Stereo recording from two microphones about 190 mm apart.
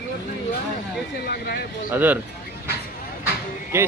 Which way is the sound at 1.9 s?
10° right (ahead or behind).